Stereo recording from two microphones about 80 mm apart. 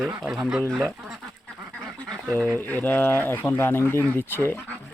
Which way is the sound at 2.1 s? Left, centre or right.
Centre.